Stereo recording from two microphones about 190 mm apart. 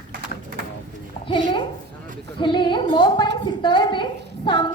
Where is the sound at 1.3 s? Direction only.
25° left (ahead or behind).